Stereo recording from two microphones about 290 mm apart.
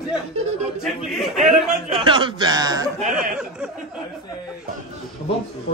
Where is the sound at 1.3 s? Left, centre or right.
Centre.